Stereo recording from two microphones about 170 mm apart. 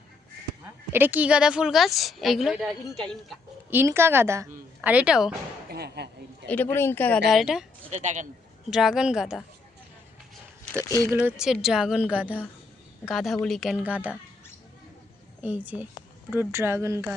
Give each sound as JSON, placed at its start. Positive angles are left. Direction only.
{"t": 0.9, "sound": "a woman's voice", "side_deg": -10}
{"t": 3.7, "sound": "speech", "side_deg": -15}
{"t": 5.7, "sound": "speech", "side_deg": -70}
{"t": 6.7, "sound": "speech", "side_deg": 10}
{"t": 7.3, "sound": "a woman's voice", "side_deg": 0}
{"t": 7.9, "sound": "speech", "side_deg": -45}
{"t": 8.7, "sound": "a woman's voice", "side_deg": 0}
{"t": 11.2, "sound": "a woman's voice", "side_deg": -5}
{"t": 15.4, "sound": "speech", "side_deg": -10}